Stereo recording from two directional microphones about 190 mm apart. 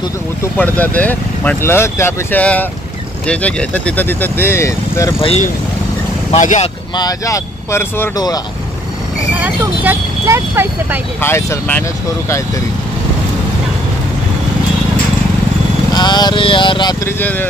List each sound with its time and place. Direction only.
0.7 s speech: 10° left (ahead or behind)
5.2 s speech: 35° left (ahead or behind)
7.0 s speech: 20° left (ahead or behind)
9.3 s speech: 10° right (ahead or behind)
11.1 s speech: 10° left (ahead or behind)
15.9 s speech: 20° left (ahead or behind)